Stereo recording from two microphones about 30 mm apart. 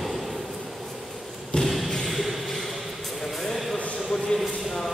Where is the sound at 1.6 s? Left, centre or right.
Centre.